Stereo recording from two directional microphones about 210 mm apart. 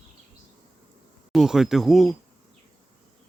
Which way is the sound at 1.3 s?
Centre (ahead or behind).